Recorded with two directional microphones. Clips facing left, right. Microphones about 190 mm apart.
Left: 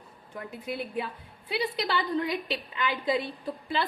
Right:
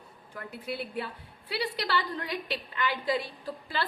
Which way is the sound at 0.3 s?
20° left (ahead or behind).